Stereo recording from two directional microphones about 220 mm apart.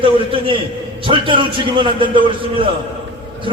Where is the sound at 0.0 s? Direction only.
25° right (ahead or behind).